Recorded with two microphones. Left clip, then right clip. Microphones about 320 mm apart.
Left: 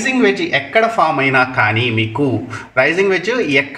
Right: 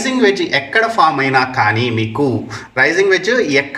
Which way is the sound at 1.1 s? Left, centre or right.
Right.